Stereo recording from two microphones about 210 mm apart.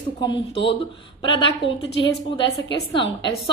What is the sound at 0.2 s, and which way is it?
A woman's voice, 20° left (ahead or behind).